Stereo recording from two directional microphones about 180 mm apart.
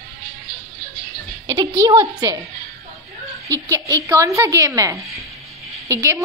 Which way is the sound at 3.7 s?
15° right (ahead or behind).